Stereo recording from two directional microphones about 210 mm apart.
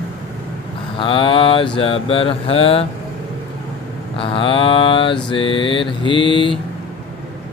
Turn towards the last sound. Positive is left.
turn(degrees=25)  # may be behind; listen again after turning